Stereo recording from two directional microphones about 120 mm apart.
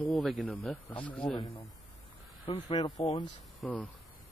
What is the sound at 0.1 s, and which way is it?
Speech, centre (ahead or behind).